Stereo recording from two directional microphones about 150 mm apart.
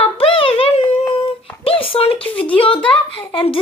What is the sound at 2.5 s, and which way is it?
Speech, 35° left (ahead or behind).